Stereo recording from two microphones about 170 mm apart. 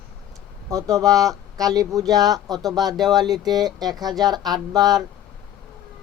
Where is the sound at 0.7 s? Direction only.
20° right (ahead or behind).